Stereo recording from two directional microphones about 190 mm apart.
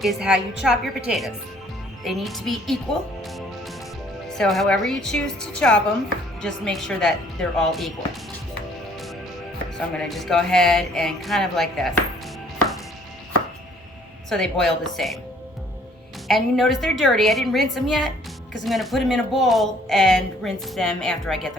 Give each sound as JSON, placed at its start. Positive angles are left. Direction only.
{"t": 0.0, "sound": "speech", "side_deg": 0}
{"t": 10.1, "sound": "speech", "side_deg": 0}
{"t": 14.3, "sound": "speech", "side_deg": 0}
{"t": 16.3, "sound": "speech", "side_deg": 0}